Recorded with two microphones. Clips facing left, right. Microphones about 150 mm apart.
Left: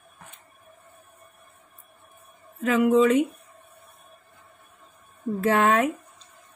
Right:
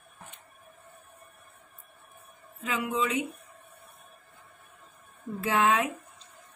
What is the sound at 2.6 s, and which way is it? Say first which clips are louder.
Speech: left 11 dB; 50° left (ahead or behind).